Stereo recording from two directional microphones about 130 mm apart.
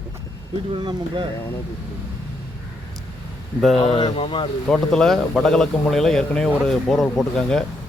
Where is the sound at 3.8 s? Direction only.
40° left (ahead or behind).